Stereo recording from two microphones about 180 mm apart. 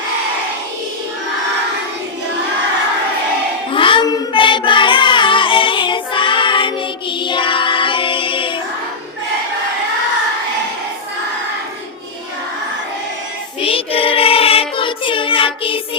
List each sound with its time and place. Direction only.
3.7 s child singing: 30° left (ahead or behind)
13.6 s child singing: 30° left (ahead or behind)